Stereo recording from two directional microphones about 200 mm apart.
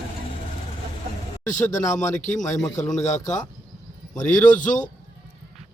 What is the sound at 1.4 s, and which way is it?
Speech, 40° left (ahead or behind).